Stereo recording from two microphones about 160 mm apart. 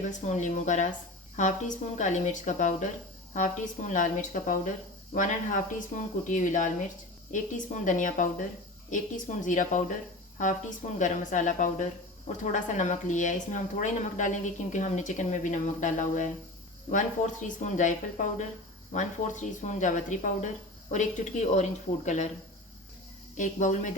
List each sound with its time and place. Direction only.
0.1 s speech: 45° left (ahead or behind)
17.6 s speech: 50° left (ahead or behind)
23.4 s speech: 50° left (ahead or behind)